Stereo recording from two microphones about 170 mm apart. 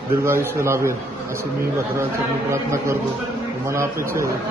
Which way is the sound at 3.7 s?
15° right (ahead or behind).